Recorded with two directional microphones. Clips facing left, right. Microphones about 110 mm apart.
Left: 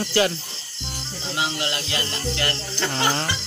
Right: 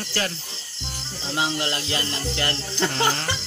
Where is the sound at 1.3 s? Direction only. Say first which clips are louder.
Right 1 dB; 30° right (ahead or behind).